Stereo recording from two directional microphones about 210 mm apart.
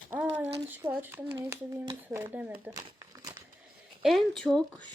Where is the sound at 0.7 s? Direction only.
10° right (ahead or behind).